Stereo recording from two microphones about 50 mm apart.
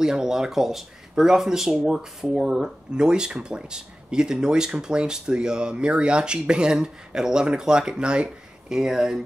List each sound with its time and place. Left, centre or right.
0.0 s speech: centre